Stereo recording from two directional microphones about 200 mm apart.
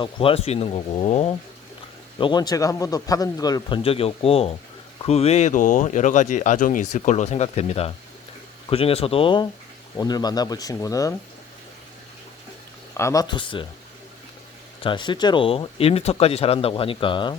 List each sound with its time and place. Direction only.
0.0 s speech: 25° left (ahead or behind)
2.1 s speech: 20° left (ahead or behind)
13.0 s speech: 15° left (ahead or behind)
14.8 s speech: 25° left (ahead or behind)